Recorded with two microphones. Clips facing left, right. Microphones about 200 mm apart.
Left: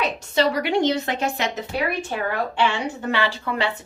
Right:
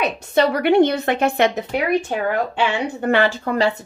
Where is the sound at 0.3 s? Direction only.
55° right (ahead or behind).